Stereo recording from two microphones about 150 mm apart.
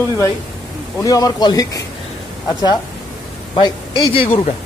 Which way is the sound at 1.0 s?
25° left (ahead or behind).